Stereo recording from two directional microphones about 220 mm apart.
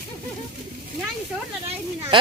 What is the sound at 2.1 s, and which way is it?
Speech, 20° right (ahead or behind).